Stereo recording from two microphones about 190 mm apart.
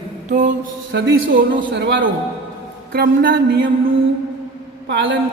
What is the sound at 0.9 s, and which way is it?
Speech, 60° right (ahead or behind).